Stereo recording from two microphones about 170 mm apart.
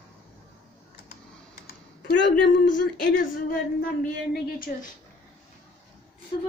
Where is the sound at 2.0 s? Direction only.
85° left.